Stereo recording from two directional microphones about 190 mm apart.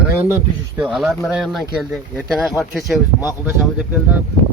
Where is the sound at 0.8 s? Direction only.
Centre (ahead or behind).